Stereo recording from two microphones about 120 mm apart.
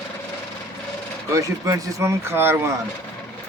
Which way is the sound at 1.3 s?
25° right (ahead or behind).